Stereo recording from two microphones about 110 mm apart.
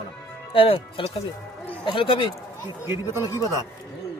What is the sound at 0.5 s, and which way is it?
Speech, 55° left (ahead or behind).